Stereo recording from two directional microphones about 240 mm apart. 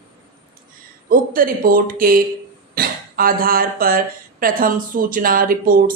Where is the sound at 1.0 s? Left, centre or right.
Right.